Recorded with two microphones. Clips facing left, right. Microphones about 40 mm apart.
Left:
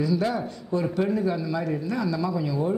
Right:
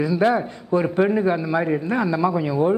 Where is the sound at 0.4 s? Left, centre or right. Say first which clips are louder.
Right 6 dB; right.